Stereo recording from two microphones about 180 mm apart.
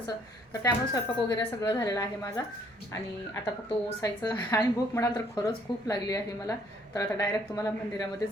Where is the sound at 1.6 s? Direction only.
20° left (ahead or behind).